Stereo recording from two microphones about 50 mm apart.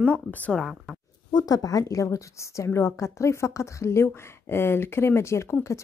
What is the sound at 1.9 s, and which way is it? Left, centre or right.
A woman's voice, left.